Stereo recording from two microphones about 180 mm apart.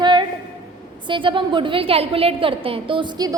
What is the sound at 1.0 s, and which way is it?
A woman's voice, 25° right (ahead or behind).